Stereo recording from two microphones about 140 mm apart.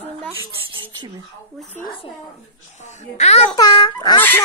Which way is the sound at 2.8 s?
55° left (ahead or behind).